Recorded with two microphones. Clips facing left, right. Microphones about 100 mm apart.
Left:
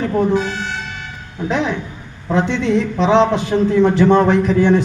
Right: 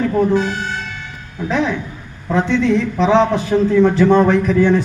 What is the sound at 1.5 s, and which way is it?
A man's voice, 20° left (ahead or behind).